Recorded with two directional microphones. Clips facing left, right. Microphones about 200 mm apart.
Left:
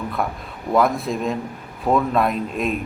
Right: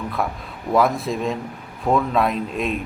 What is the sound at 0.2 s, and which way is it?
Speech, centre (ahead or behind).